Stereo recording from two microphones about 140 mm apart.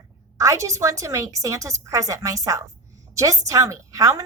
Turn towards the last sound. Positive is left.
turn(degrees=-25)  # may be behind; listen again after turning